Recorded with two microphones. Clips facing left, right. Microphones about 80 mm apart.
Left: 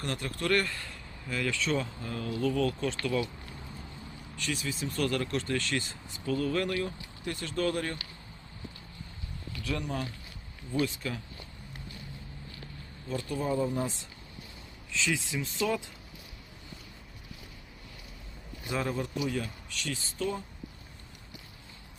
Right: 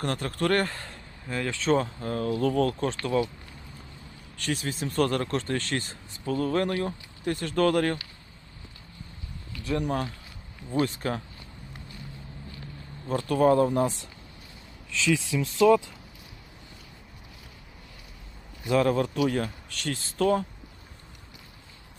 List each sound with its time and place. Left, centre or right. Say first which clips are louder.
0.0 s speech: right 6 dB; right
4.4 s speech: right 4 dB; right
9.8 s speech: right 6 dB; right
13.1 s speech: right 10 dB; right
14.9 s speech: right 6 dB; right
18.7 s speech: right 9 dB; right